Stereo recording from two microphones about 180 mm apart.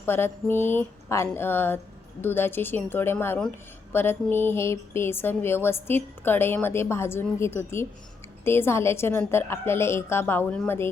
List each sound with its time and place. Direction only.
0.0 s speech: 15° left (ahead or behind)